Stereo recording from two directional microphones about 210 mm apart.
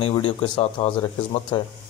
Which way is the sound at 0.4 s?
25° left (ahead or behind).